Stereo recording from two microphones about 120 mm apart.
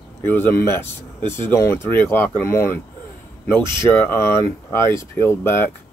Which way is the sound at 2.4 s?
20° left (ahead or behind).